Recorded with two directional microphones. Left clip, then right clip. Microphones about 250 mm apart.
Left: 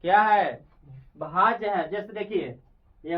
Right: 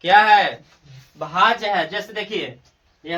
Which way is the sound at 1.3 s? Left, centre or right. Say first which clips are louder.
Right 5 dB; centre.